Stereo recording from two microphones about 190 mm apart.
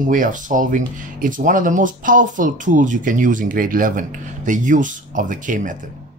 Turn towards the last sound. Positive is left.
turn(degrees=-45)  # may be behind; listen again after turning